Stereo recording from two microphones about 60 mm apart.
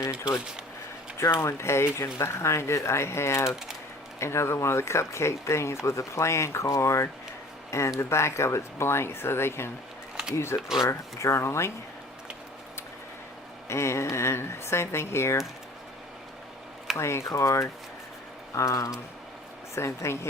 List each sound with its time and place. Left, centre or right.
1.2 s speech: left
13.7 s speech: left
17.0 s speech: left
19.7 s speech: left